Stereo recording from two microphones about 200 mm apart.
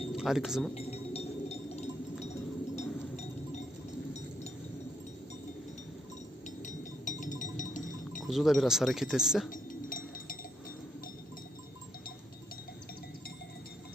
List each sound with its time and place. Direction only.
0.1 s speech: centre (ahead or behind)
0.7 s a sound: 30° left (ahead or behind)
2.2 s chink: 35° left (ahead or behind)
6.6 s music: 40° left (ahead or behind)
8.2 s speech: centre (ahead or behind)
9.5 s chink: 45° left (ahead or behind)